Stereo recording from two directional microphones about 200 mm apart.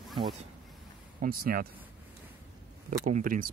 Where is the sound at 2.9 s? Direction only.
40° right (ahead or behind).